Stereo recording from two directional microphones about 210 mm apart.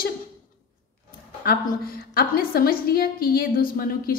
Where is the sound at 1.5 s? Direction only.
45° left (ahead or behind).